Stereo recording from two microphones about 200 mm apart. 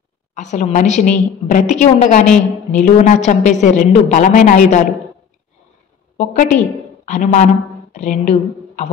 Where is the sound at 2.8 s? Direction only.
35° left (ahead or behind).